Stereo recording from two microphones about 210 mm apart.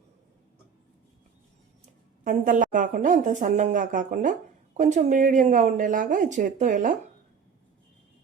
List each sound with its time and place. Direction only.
2.2 s a woman's voice: 40° right (ahead or behind)